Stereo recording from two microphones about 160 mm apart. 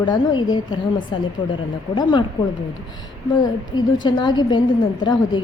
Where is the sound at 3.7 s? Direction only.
30° left (ahead or behind).